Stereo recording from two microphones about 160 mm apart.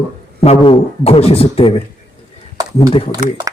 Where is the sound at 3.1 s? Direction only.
20° right (ahead or behind).